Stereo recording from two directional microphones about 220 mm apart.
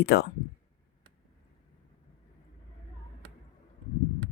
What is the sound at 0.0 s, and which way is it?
Speech, 45° left (ahead or behind).